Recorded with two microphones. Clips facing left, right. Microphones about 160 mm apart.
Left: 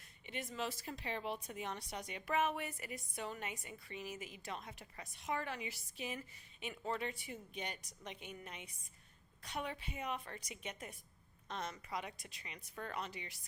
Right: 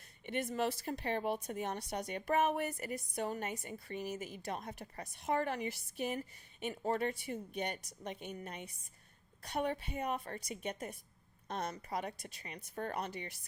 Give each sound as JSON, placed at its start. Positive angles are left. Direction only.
{"t": 0.3, "sound": "speech", "side_deg": -55}
{"t": 7.6, "sound": "a woman's voice", "side_deg": -60}
{"t": 8.0, "sound": "a woman's voice", "side_deg": -40}